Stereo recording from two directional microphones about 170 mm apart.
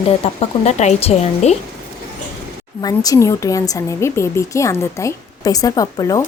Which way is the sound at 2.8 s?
20° left (ahead or behind).